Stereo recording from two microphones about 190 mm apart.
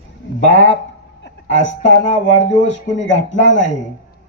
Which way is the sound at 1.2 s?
75° left (ahead or behind).